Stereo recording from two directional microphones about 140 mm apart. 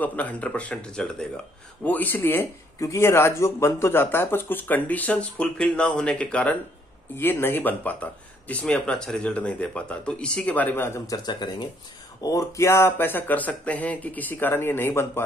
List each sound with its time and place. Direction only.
0.0 s speech: 10° left (ahead or behind)